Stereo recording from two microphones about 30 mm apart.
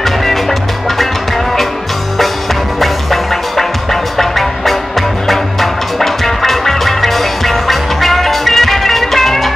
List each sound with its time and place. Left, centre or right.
0.0 s music: centre
2.8 s music: centre